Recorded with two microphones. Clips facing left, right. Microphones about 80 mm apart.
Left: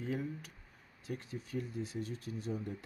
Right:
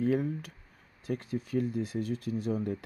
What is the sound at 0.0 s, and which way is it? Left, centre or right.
Speech, right.